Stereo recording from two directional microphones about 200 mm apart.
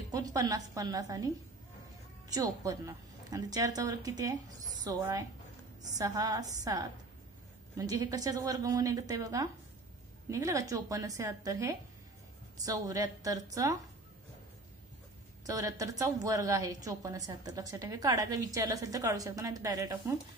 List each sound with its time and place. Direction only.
0.1 s a woman's voice: 20° right (ahead or behind)
15.4 s a woman's voice: 15° right (ahead or behind)